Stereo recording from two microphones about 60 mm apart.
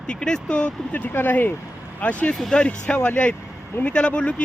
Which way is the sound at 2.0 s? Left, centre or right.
Left.